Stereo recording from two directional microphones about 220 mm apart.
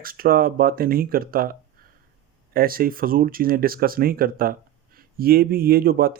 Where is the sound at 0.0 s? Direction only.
40° right (ahead or behind).